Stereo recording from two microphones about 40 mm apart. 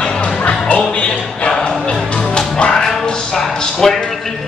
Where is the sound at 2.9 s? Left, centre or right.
Centre.